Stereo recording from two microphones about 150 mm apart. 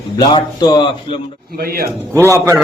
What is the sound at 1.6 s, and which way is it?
Speech, 90° right.